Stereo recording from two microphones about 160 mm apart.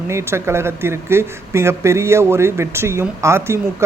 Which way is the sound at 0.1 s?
15° right (ahead or behind).